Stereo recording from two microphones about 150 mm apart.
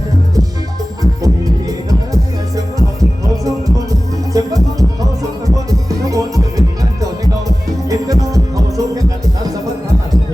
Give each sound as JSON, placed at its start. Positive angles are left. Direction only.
{"t": 2.6, "sound": "music", "side_deg": -25}
{"t": 6.1, "sound": "music", "side_deg": -20}